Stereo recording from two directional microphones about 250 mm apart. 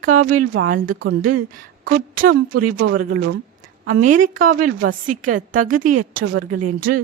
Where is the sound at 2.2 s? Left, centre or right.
Right.